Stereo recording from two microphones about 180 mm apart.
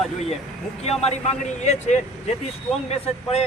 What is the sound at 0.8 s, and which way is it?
Speech, 35° left (ahead or behind).